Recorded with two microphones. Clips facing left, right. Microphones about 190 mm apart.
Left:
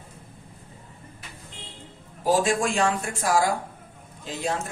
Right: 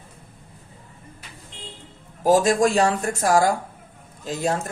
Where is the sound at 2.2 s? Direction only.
40° right (ahead or behind).